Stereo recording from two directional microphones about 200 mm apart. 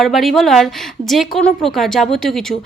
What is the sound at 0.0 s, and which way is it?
A woman's voice, centre (ahead or behind).